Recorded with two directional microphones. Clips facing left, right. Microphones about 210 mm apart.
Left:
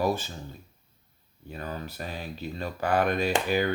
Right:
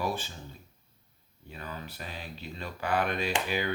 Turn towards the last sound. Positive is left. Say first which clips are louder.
# left 5 dB
turn(degrees=45)  # may be behind; listen again after turning